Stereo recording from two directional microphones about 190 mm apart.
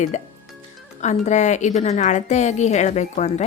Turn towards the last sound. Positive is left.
turn(degrees=40)  # may be behind; listen again after turning